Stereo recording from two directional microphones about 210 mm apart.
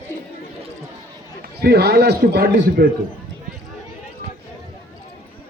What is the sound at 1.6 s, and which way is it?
A man's voice, 50° right (ahead or behind).